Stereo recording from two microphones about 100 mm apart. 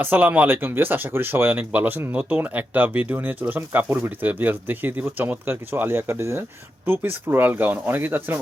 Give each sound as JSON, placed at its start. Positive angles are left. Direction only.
{"t": 0.0, "sound": "speech", "side_deg": -15}